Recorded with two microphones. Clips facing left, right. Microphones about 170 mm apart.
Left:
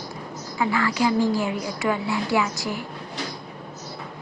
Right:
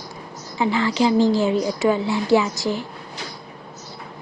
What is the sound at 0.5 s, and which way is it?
A woman's voice, 25° right (ahead or behind).